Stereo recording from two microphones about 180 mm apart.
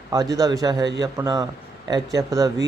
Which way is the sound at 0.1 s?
20° right (ahead or behind).